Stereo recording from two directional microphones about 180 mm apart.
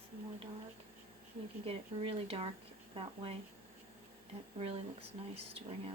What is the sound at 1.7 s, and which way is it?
Speech, 35° right (ahead or behind).